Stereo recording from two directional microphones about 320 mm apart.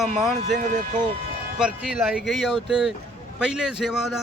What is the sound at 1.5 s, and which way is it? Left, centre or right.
A man's voice, centre.